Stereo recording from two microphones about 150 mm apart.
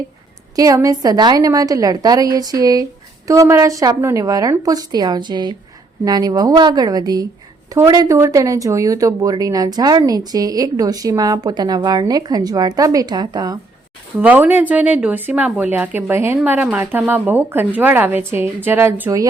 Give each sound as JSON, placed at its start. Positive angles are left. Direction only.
{"t": 0.5, "sound": "speech", "side_deg": -25}
{"t": 14.2, "sound": "speech", "side_deg": -10}